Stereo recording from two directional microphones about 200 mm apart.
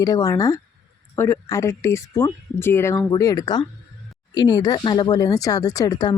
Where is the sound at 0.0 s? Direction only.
15° left (ahead or behind).